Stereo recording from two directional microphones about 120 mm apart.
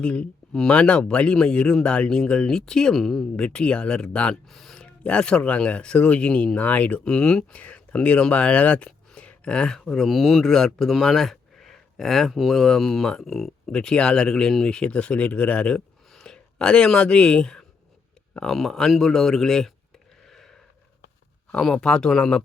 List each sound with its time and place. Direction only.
0.0 s speech: 10° left (ahead or behind)
20.2 s a sound: 5° left (ahead or behind)
21.5 s speech: 5° left (ahead or behind)